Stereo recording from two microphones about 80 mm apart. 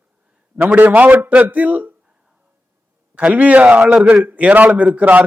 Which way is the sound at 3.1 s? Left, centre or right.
Centre.